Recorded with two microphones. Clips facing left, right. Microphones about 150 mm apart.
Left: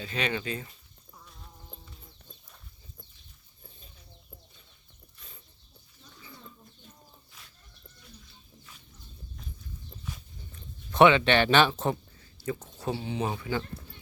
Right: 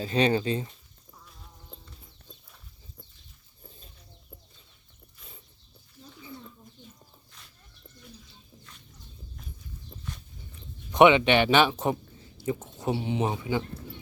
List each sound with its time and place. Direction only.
0.0 s speech: 35° right (ahead or behind)
1.2 s fly: centre (ahead or behind)
10.5 s speech: 15° right (ahead or behind)